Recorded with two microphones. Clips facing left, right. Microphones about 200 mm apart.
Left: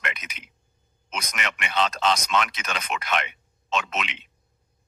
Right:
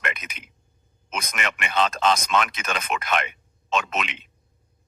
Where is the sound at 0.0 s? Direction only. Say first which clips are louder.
Right 3 dB; 50° right (ahead or behind).